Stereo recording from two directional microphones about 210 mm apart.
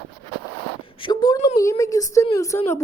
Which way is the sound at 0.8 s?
25° left (ahead or behind).